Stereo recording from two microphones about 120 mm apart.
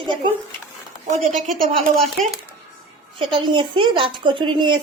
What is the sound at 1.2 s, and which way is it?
Speech, 90° right.